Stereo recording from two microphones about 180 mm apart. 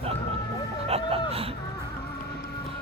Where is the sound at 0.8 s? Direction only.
35° right (ahead or behind).